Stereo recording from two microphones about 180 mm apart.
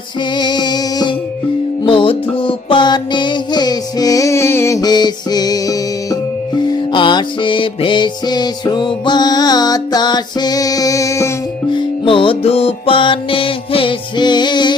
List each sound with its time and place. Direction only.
0.3 s music: 25° left (ahead or behind)
11.7 s music: 30° left (ahead or behind)